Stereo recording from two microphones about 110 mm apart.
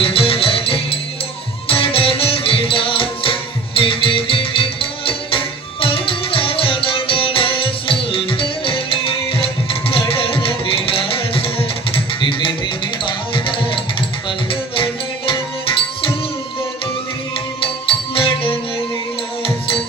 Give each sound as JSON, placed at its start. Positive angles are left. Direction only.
{"t": 0.0, "sound": "music", "side_deg": 60}
{"t": 17.6, "sound": "music", "side_deg": 55}